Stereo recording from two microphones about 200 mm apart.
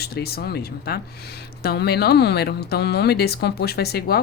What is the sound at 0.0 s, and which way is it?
A woman's voice, 50° left (ahead or behind).